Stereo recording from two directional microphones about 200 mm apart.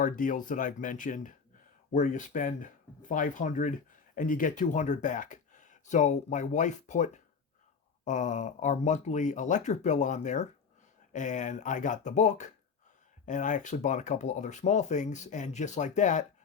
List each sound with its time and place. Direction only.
0.0 s speech: 40° left (ahead or behind)